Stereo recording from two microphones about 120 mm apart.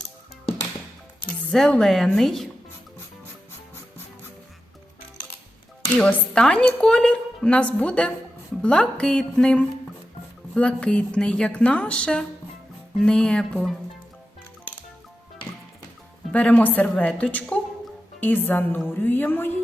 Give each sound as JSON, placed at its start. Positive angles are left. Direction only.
{"t": 1.5, "sound": "speech", "side_deg": 5}
{"t": 6.0, "sound": "a woman's voice", "side_deg": 5}
{"t": 16.3, "sound": "a woman's voice", "side_deg": 10}